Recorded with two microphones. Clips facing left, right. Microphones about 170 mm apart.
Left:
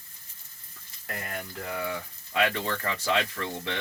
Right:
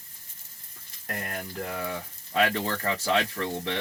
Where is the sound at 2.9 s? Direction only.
25° right (ahead or behind).